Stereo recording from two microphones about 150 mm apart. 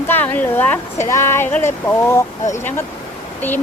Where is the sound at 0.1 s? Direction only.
15° left (ahead or behind).